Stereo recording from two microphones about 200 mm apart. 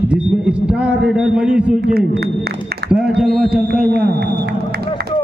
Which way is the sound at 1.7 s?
55° right (ahead or behind).